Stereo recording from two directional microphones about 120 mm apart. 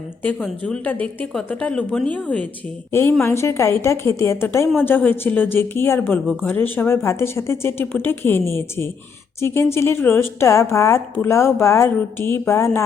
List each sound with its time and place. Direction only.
0.3 s a woman's voice: 5° left (ahead or behind)
2.9 s a woman's voice: 20° left (ahead or behind)